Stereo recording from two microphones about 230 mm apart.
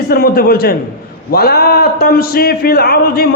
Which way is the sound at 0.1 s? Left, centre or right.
Left.